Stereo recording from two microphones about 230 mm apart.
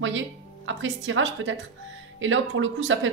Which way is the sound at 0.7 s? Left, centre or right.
Right.